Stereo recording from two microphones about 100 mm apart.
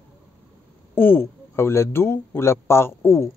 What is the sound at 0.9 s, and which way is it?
Speech, 20° left (ahead or behind).